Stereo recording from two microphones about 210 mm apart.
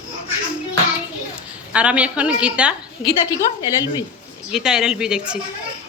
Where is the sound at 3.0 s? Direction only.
20° left (ahead or behind).